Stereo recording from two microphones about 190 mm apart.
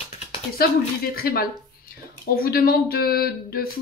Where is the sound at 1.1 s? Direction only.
55° left (ahead or behind).